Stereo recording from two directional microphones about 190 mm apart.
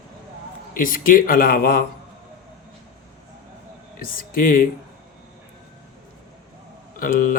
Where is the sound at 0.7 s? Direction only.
45° left (ahead or behind).